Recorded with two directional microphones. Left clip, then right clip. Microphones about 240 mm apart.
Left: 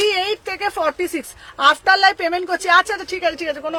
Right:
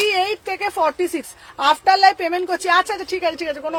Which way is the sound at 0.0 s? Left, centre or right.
Centre.